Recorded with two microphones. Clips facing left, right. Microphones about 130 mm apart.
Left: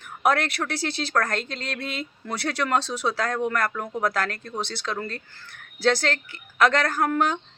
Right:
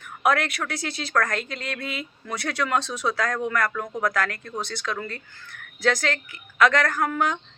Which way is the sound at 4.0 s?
30° left (ahead or behind).